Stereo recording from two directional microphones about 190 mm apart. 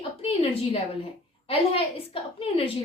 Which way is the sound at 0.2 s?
30° left (ahead or behind).